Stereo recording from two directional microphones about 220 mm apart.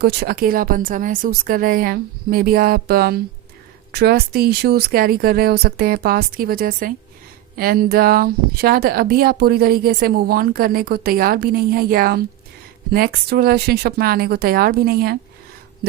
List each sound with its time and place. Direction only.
0.0 s speech: 45° right (ahead or behind)